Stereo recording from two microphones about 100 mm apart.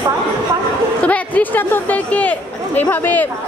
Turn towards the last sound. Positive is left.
turn(degrees=20)  # may be behind; listen again after turning